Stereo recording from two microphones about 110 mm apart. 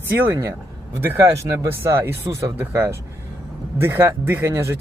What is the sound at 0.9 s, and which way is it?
Speech, 25° right (ahead or behind).